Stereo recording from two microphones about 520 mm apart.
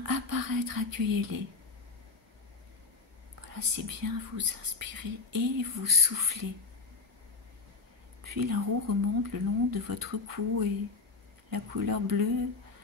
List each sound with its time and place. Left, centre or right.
0.0 s speech: right
3.3 s speech: right
8.4 s speech: right